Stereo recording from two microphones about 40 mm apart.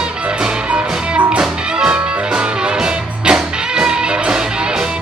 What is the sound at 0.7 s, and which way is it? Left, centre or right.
Music, right.